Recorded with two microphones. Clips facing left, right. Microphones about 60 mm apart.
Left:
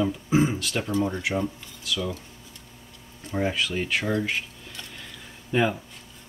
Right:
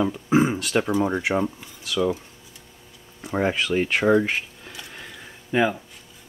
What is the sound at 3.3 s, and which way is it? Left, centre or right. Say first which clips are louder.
Speech: right 4 dB; right.